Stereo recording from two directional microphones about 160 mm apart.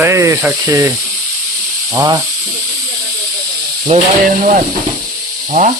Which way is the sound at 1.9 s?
20° right (ahead or behind).